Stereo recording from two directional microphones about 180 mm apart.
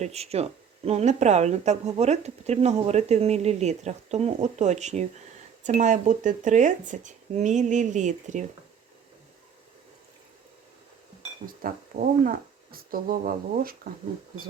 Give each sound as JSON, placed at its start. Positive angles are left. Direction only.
{"t": 0.0, "sound": "speech", "side_deg": -35}
{"t": 11.6, "sound": "speech", "side_deg": -50}